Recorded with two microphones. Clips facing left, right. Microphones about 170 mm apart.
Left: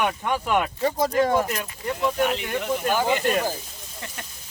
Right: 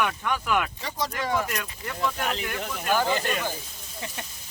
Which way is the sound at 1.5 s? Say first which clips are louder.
Left 4 dB; 30° left (ahead or behind).